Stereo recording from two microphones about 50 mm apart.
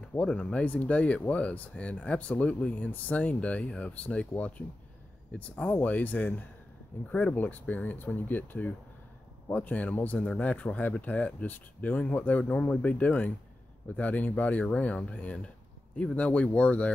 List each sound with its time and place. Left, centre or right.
0.2 s speech: left